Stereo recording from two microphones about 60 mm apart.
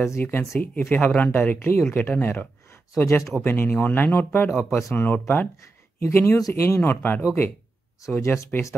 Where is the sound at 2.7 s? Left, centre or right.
Left.